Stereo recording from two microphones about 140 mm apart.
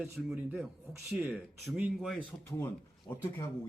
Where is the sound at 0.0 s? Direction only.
Centre (ahead or behind).